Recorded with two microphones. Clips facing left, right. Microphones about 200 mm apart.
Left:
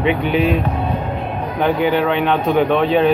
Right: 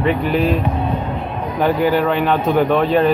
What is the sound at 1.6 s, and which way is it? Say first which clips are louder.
Speech: right 1 dB; 5° right (ahead or behind).